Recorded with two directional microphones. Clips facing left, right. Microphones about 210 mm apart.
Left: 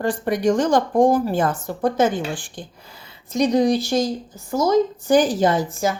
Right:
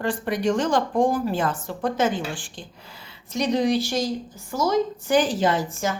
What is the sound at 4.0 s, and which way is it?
Speech, 20° left (ahead or behind).